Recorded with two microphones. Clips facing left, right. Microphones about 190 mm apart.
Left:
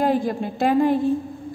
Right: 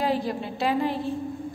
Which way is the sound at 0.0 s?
50° left (ahead or behind).